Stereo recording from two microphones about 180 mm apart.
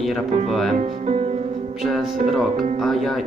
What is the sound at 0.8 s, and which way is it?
Speech, 35° right (ahead or behind).